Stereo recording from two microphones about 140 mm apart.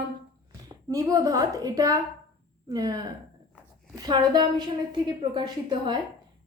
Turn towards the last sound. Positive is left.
turn(degrees=-35)  # may be behind; listen again after turning